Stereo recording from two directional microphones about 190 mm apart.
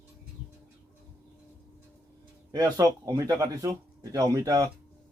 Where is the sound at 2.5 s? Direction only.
20° right (ahead or behind).